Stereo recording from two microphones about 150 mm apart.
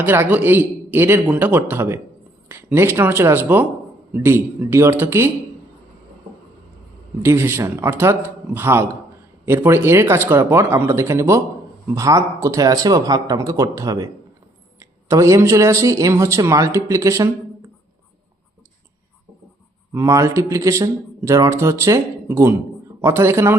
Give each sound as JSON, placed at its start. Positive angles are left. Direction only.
{"t": 0.0, "sound": "speech", "side_deg": -15}
{"t": 7.2, "sound": "a man's voice", "side_deg": -15}
{"t": 19.9, "sound": "a man's voice", "side_deg": -20}